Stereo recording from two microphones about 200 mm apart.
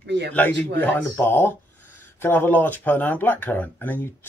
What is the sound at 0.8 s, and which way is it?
Speech, 10° left (ahead or behind).